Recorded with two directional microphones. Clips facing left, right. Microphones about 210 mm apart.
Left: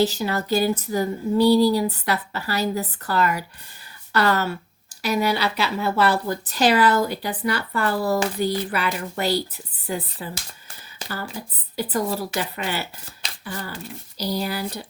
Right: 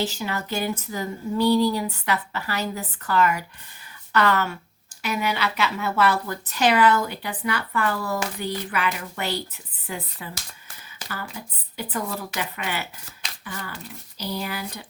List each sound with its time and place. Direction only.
0.0 s speech: 35° left (ahead or behind)